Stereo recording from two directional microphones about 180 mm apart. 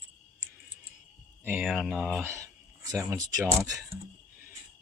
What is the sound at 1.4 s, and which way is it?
Speech, 5° right (ahead or behind).